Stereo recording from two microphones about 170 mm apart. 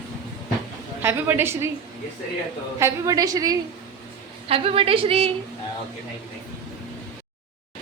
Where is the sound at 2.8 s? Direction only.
15° right (ahead or behind).